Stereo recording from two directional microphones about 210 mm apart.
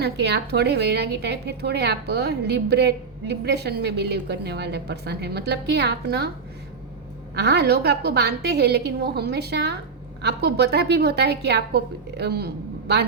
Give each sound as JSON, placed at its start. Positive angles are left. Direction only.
{"t": 0.0, "sound": "a woman's voice", "side_deg": -50}
{"t": 7.3, "sound": "a woman's voice", "side_deg": -50}